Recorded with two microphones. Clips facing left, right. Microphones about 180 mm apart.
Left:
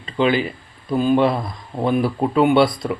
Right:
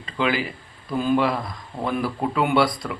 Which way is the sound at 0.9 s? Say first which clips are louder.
Left 4 dB; 20° left (ahead or behind).